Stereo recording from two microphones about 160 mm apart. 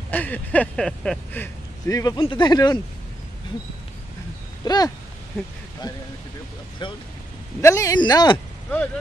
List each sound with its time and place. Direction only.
0.1 s speech: 10° left (ahead or behind)
1.4 s speech: 20° left (ahead or behind)
2.1 s speech: 30° left (ahead or behind)
4.6 s speech: 25° left (ahead or behind)
6.8 s speech: 30° left (ahead or behind)
7.6 s speech: 20° left (ahead or behind)